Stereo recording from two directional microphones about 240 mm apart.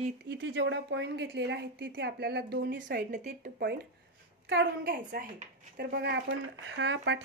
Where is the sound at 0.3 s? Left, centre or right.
Right.